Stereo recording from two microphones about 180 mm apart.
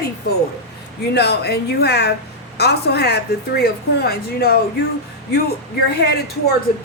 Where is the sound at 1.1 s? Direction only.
65° left (ahead or behind).